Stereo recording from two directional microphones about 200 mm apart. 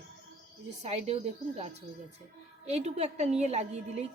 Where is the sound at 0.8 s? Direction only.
30° right (ahead or behind).